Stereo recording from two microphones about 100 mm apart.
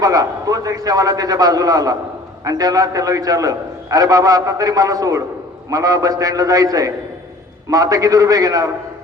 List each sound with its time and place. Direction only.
0.0 s a man's voice: 35° right (ahead or behind)